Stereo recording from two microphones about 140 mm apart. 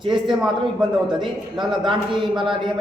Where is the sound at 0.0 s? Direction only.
35° right (ahead or behind).